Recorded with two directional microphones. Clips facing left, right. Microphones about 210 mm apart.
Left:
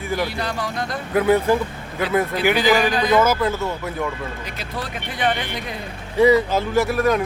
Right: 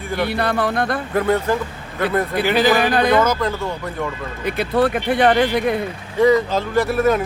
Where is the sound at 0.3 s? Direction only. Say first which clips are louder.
Right 6 dB; 60° right (ahead or behind).